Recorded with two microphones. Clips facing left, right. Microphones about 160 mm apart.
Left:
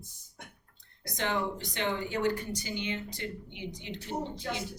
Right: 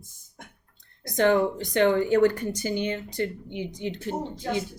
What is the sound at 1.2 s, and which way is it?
Speech, 50° right (ahead or behind).